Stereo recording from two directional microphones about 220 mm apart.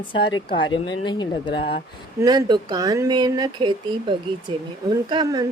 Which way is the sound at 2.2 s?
20° right (ahead or behind).